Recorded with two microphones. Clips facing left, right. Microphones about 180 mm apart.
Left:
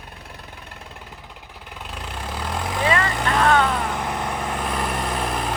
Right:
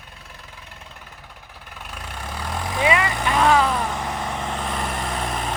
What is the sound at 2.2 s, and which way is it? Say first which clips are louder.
Vehicle: left 1 dB; 20° left (ahead or behind).